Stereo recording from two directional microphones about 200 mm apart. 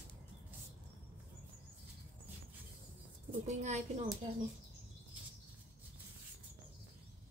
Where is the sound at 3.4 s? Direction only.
35° right (ahead or behind).